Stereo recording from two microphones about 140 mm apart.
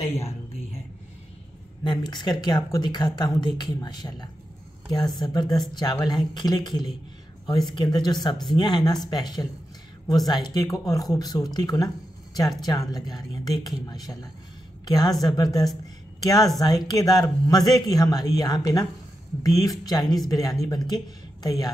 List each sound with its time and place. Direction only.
1.9 s a man's voice: 30° left (ahead or behind)